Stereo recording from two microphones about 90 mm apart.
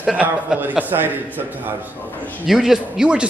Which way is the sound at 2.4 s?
5° right (ahead or behind).